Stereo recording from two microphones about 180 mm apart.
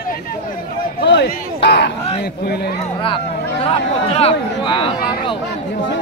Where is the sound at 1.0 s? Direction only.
75° left (ahead or behind).